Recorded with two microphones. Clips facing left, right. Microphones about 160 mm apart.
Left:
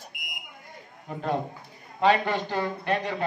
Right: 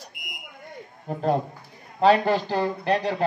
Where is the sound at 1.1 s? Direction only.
40° right (ahead or behind).